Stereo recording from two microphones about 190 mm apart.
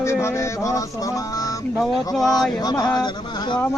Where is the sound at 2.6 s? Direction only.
20° left (ahead or behind).